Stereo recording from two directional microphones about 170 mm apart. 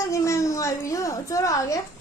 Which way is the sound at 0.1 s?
15° left (ahead or behind).